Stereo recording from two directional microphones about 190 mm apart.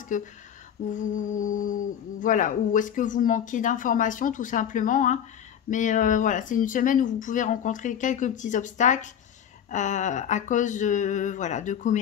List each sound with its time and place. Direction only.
0.1 s speech: 40° left (ahead or behind)